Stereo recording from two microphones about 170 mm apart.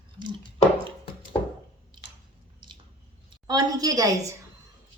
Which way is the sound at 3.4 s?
20° right (ahead or behind).